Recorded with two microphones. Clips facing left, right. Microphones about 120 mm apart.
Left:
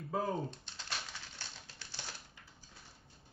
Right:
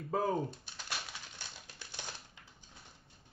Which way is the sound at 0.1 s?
20° right (ahead or behind).